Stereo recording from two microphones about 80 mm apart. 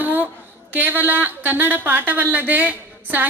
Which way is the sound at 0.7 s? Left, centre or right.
Right.